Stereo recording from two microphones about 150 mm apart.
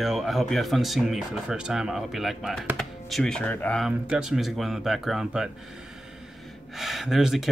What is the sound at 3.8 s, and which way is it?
Speech, 5° right (ahead or behind).